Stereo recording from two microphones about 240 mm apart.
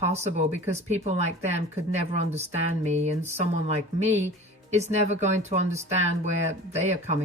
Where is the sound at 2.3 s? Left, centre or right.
Right.